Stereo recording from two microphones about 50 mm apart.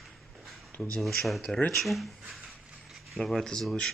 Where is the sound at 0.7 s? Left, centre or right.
Left.